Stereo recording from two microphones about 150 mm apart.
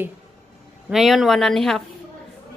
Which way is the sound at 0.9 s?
Centre (ahead or behind).